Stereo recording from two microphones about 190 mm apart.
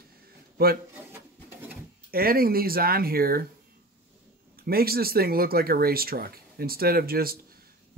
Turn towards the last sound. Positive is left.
turn(degrees=-50)  # may be behind; listen again after turning